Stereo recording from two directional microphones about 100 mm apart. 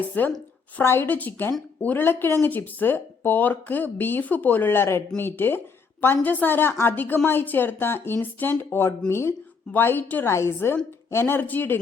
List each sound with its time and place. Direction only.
0.2 s speech: 20° left (ahead or behind)